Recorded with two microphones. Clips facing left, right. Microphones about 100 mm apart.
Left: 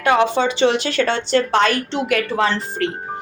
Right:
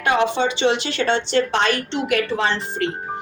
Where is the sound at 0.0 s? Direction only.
40° left (ahead or behind).